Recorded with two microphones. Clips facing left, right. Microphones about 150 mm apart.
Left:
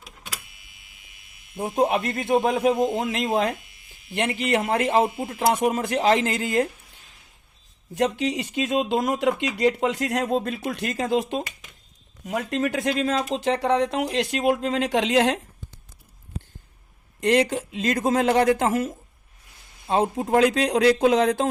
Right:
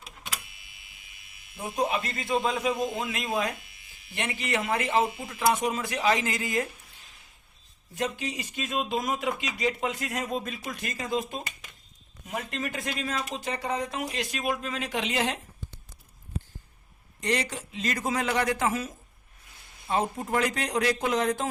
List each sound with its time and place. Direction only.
1.5 s speech: 55° left (ahead or behind)
7.9 s speech: 70° left (ahead or behind); by 15.4 s 90° left
17.2 s speech: 55° left (ahead or behind)
19.9 s speech: 65° left (ahead or behind)